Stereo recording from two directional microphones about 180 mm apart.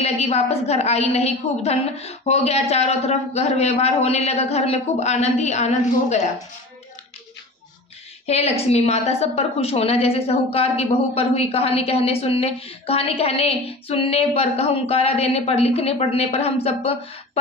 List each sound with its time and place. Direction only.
0.0 s a woman's voice: 35° left (ahead or behind)
8.3 s a woman's voice: 35° left (ahead or behind)